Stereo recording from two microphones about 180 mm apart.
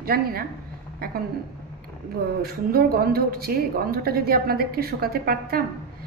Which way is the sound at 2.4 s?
55° right (ahead or behind).